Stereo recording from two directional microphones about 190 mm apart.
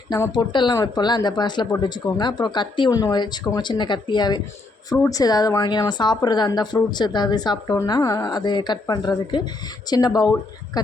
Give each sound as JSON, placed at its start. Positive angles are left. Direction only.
{"t": 0.1, "sound": "a woman's voice", "side_deg": 20}